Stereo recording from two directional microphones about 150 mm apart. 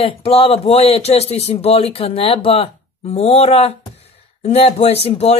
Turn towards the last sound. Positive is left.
turn(degrees=45)  # may be behind; listen again after turning